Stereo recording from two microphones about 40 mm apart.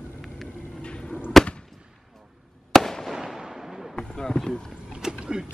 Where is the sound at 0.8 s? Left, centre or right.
Left.